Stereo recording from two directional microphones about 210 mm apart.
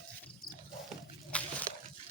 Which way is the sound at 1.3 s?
5° left (ahead or behind).